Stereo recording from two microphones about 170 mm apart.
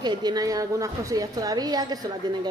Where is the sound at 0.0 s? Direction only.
25° right (ahead or behind).